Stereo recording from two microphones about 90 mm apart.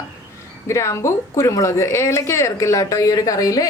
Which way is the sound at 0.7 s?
35° left (ahead or behind).